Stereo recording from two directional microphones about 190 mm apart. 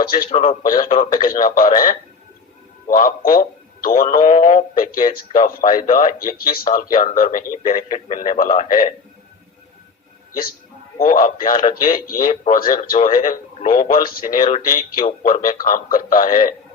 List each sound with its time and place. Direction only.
0.0 s speech: 50° left (ahead or behind)
0.3 s speech: 30° left (ahead or behind)
0.6 s speech: 45° left (ahead or behind)
10.9 s speech: 45° left (ahead or behind)
13.6 s a man's voice: 35° left (ahead or behind)
14.8 s speech: 35° left (ahead or behind)